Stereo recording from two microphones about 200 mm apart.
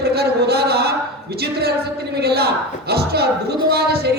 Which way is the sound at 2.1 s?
55° right (ahead or behind).